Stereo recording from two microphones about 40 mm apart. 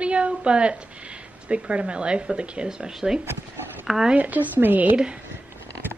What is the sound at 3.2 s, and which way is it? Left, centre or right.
Speech, right.